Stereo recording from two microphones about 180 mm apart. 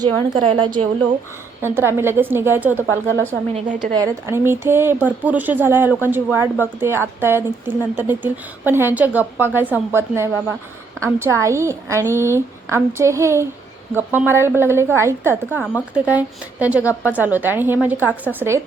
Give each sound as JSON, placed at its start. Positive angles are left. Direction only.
{"t": 0.0, "sound": "a woman's voice", "side_deg": -30}
{"t": 1.6, "sound": "a woman's voice", "side_deg": -15}